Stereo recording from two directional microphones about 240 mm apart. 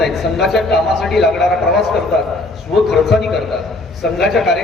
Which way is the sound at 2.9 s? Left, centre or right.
Centre.